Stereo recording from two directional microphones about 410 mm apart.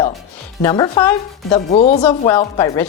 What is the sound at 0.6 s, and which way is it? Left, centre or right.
A woman's voice, centre.